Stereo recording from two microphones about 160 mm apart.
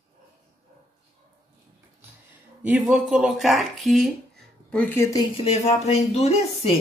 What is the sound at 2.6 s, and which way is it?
Speech, centre (ahead or behind).